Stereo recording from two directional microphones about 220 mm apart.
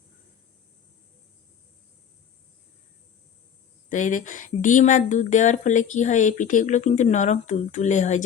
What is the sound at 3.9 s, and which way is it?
Speech, 35° left (ahead or behind).